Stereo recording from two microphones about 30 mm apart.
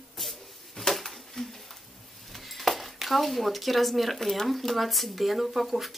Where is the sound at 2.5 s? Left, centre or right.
Centre.